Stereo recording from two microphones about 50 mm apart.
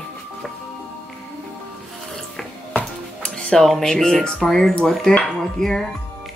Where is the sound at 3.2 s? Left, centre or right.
Centre.